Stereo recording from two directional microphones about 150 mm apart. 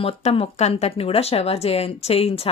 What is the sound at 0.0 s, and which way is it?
A woman's voice, 40° left (ahead or behind).